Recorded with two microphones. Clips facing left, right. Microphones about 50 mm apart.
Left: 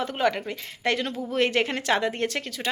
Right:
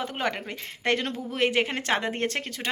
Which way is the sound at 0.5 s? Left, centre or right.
Right.